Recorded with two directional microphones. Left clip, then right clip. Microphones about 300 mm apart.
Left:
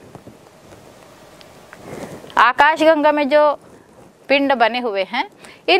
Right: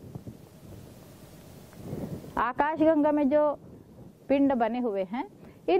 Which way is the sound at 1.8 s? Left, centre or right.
Centre.